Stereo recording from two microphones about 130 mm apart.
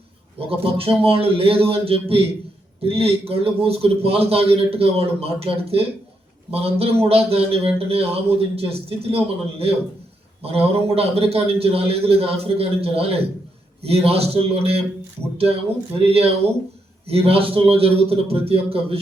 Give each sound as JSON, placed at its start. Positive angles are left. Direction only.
{"t": 0.3, "sound": "a man's voice", "side_deg": -45}
{"t": 16.0, "sound": "a man's voice", "side_deg": -50}